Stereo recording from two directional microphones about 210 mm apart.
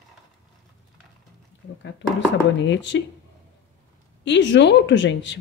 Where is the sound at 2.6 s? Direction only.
60° left (ahead or behind).